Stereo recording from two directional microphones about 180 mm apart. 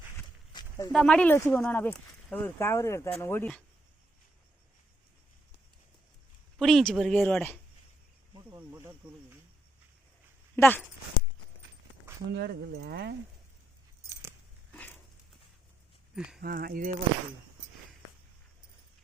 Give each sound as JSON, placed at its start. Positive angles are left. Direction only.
{"t": 0.5, "sound": "a sound", "side_deg": 20}
{"t": 0.9, "sound": "speech", "side_deg": 5}
{"t": 6.6, "sound": "speech", "side_deg": 0}
{"t": 8.4, "sound": "speech", "side_deg": -15}
{"t": 10.5, "sound": "speech", "side_deg": 10}
{"t": 12.3, "sound": "speech", "side_deg": -60}
{"t": 14.1, "sound": "keys jangling", "side_deg": -15}
{"t": 14.7, "sound": "a sound", "side_deg": 10}
{"t": 16.1, "sound": "speech", "side_deg": -5}
{"t": 16.4, "sound": "speech", "side_deg": -55}